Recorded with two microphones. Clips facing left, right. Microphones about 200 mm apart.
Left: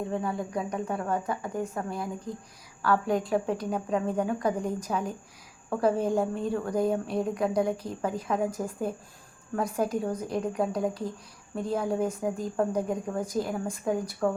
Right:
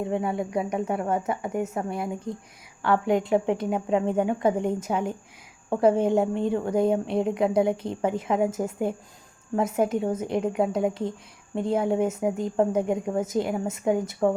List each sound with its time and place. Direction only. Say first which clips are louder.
0.1 s a woman's voice: right 4 dB; 25° right (ahead or behind)